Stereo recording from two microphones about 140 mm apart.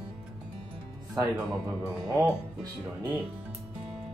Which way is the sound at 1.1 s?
5° right (ahead or behind).